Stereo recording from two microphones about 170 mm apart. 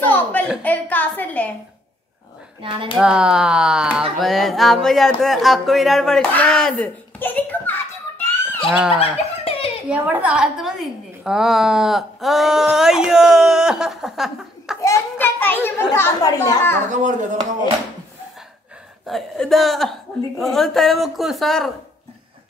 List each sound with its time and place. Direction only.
0.0 s a sound: 10° left (ahead or behind)
3.0 s a woman's voice: 5° right (ahead or behind); by 7.7 s 10° left (ahead or behind)
8.2 s a sound: 10° left (ahead or behind)
8.7 s a woman's voice: 5° right (ahead or behind)
9.4 s a sound: 35° left (ahead or behind)
9.8 s a woman's voice: 10° right (ahead or behind)
14.8 s children playing: 15° left (ahead or behind)
16.9 s speech: 45° right (ahead or behind)
19.0 s a woman's voice: centre (ahead or behind)